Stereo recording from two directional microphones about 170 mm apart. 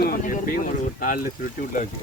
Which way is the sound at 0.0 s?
55° left (ahead or behind).